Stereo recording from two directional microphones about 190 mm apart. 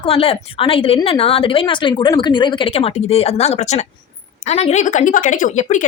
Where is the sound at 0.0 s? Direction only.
30° left (ahead or behind).